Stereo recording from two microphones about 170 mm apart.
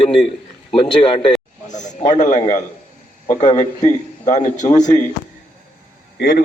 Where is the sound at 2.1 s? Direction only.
45° left (ahead or behind).